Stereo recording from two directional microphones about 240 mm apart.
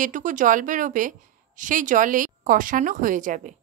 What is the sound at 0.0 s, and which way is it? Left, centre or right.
A woman's voice, right.